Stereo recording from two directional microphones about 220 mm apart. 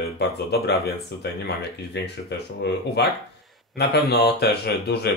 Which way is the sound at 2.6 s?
50° left (ahead or behind).